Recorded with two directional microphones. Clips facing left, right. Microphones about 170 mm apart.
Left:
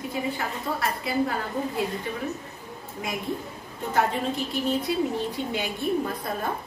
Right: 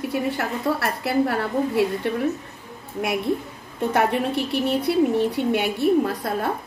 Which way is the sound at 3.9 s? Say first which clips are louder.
Right 3 dB; 70° right (ahead or behind).